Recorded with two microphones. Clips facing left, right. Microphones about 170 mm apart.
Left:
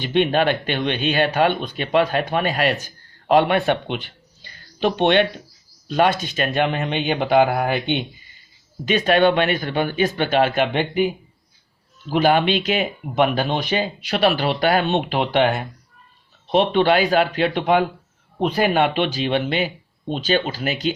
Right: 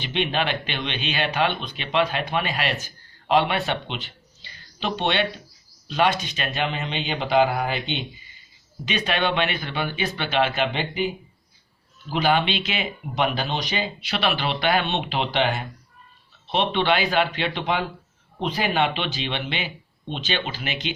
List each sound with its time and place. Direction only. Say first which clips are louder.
0.0 s speech: left 7 dB; 45° left (ahead or behind)
6.2 s speech: left 6 dB; 45° left (ahead or behind)
12.1 s speech: left 5 dB; 45° left (ahead or behind)